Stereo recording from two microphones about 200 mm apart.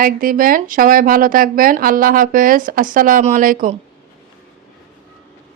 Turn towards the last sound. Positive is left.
turn(degrees=-40)  # may be behind; listen again after turning